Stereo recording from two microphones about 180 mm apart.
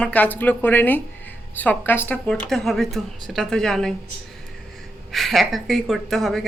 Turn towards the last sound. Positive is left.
turn(degrees=0)  # may be behind; listen again after turning